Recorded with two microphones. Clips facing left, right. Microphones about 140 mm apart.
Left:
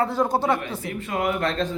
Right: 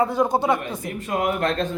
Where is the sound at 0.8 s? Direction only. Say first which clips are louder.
Right 1 dB; 45° right (ahead or behind).